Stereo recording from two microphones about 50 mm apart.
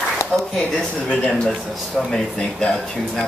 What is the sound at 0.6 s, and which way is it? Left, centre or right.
Speech, centre.